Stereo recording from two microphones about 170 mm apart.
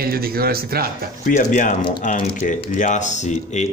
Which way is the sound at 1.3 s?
50° left (ahead or behind).